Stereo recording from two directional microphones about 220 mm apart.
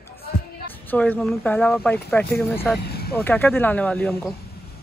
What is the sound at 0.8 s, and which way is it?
Speech, 10° left (ahead or behind).